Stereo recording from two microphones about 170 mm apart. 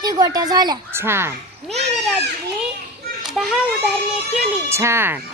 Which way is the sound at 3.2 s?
Centre (ahead or behind).